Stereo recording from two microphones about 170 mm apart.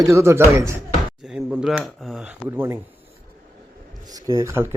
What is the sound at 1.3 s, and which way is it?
A man's voice, 5° right (ahead or behind).